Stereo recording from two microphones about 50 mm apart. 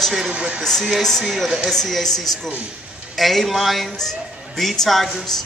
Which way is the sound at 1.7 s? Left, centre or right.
Centre.